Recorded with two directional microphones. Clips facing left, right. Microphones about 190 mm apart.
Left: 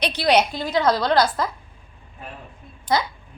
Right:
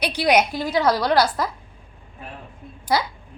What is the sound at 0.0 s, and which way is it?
A woman's voice, 10° right (ahead or behind).